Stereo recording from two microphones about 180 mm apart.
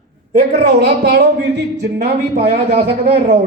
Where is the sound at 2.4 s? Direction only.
35° right (ahead or behind).